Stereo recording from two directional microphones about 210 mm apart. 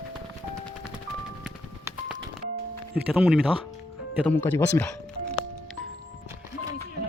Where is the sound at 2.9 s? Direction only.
5° right (ahead or behind).